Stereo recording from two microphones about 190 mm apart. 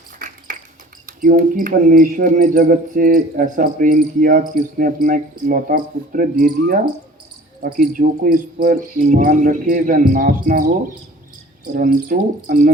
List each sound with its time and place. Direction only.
1.0 s speech: 45° right (ahead or behind)
11.7 s speech: 45° right (ahead or behind)